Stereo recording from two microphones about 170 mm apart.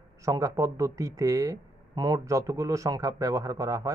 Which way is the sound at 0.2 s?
20° right (ahead or behind).